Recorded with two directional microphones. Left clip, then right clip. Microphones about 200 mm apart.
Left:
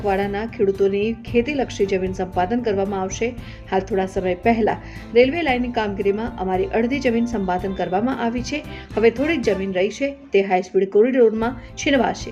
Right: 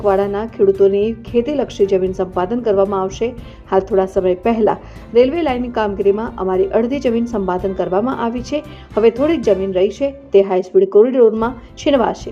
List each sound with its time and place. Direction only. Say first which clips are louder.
0.0 s a woman's voice: right 6 dB; 5° right (ahead or behind)